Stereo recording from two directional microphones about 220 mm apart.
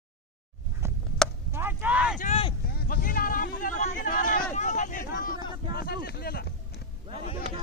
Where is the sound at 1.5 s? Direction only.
10° right (ahead or behind).